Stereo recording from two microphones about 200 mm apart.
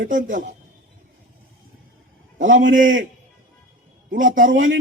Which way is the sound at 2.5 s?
40° right (ahead or behind).